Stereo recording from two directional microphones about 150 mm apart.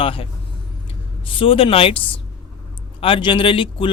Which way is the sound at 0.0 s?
35° left (ahead or behind).